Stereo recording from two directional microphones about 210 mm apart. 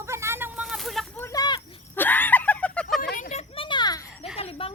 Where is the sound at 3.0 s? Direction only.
40° left (ahead or behind).